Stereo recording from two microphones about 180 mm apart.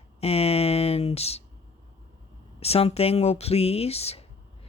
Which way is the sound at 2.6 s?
35° left (ahead or behind).